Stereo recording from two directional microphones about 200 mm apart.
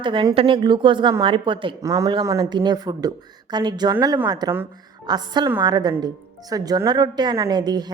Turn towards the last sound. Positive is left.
turn(degrees=-20)  # may be behind; listen again after turning